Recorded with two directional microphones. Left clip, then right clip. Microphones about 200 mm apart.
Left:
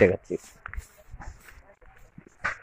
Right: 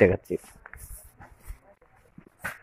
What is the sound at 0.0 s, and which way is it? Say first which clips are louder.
Speech: even; 5° right (ahead or behind).